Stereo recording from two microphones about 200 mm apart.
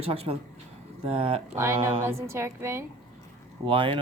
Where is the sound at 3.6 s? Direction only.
25° right (ahead or behind).